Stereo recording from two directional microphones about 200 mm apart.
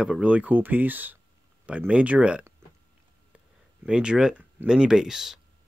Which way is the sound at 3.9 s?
5° right (ahead or behind).